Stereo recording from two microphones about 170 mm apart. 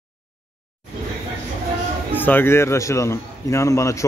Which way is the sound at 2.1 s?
10° left (ahead or behind).